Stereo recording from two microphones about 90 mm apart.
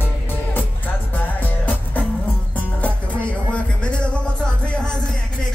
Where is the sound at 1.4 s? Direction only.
20° left (ahead or behind).